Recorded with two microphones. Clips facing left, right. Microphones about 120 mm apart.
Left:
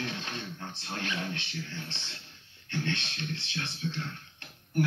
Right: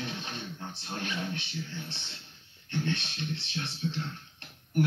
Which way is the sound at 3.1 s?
15° right (ahead or behind).